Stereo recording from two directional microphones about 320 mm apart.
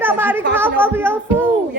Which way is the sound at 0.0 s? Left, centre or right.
Centre.